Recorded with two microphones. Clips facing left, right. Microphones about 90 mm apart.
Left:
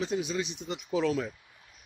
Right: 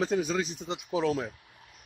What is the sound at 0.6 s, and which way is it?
Speech, 20° right (ahead or behind).